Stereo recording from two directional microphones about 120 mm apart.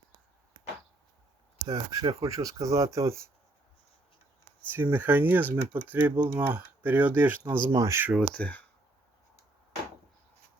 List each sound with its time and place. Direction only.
1.6 s speech: 35° right (ahead or behind)
4.7 s speech: 15° right (ahead or behind)
7.7 s speech: 25° right (ahead or behind)
8.4 s speech: 10° left (ahead or behind)